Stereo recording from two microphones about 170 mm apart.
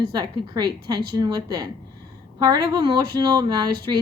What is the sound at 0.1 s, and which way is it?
Speech, 25° right (ahead or behind).